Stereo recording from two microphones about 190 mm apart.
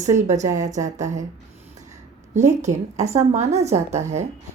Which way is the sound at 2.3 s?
40° right (ahead or behind).